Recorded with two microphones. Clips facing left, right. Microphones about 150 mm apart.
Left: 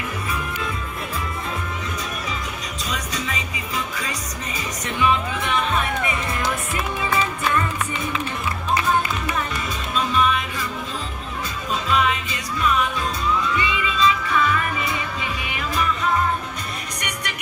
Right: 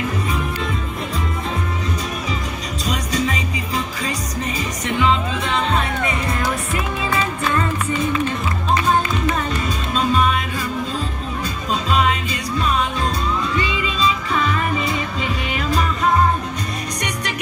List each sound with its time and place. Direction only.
2.9 s music: 65° right (ahead or behind)
5.0 s music: 25° right (ahead or behind)
9.9 s music: 20° right (ahead or behind)
11.7 s music: 20° right (ahead or behind)